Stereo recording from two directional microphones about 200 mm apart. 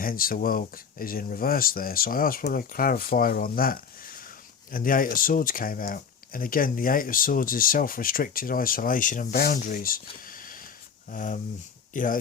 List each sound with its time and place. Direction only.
0.0 s speech: 45° left (ahead or behind)
10.2 s a sound: 45° left (ahead or behind)
11.1 s speech: 40° left (ahead or behind)